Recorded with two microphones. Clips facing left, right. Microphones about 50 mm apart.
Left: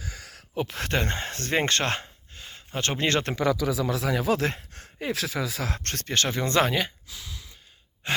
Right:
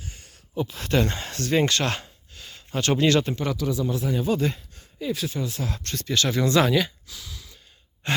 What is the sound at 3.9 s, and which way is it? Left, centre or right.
Speech, left.